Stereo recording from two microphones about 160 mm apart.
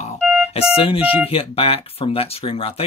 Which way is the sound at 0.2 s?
5° right (ahead or behind).